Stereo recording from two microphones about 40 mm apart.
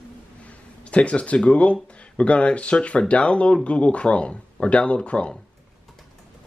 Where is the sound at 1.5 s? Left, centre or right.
Left.